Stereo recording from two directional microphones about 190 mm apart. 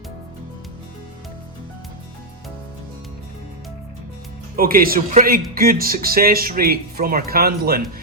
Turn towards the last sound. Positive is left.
turn(degrees=-50)  # may be behind; listen again after turning